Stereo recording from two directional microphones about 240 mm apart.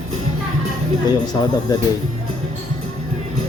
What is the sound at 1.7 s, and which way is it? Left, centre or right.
Speech, centre.